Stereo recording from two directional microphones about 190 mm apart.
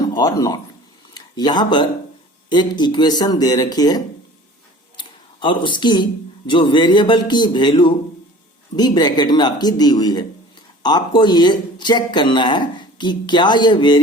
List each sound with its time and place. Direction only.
0.0 s speech: 20° left (ahead or behind)
4.9 s a sound: 25° left (ahead or behind)
6.5 s speech: 25° left (ahead or behind)